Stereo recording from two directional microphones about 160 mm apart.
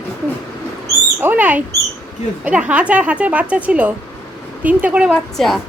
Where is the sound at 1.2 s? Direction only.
10° right (ahead or behind).